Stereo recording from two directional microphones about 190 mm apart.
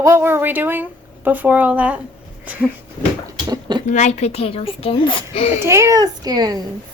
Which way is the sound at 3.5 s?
20° right (ahead or behind).